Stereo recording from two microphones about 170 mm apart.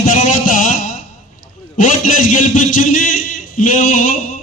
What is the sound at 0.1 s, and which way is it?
Music, 50° left (ahead or behind).